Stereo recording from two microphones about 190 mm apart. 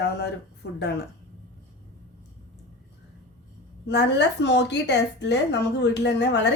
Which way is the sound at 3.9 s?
65° left (ahead or behind).